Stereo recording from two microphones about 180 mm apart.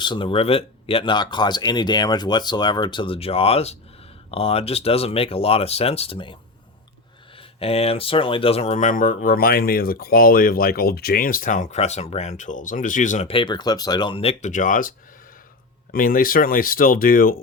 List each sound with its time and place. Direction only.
0.0 s speech: 25° left (ahead or behind)
7.3 s speech: 35° left (ahead or behind); by 17.4 s 50° left (ahead or behind)